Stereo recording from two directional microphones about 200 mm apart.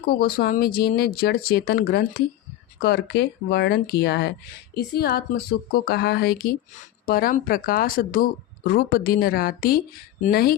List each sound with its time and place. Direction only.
0.1 s speech: 50° left (ahead or behind)